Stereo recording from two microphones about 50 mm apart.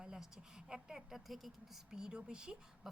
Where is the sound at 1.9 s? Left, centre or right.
Centre.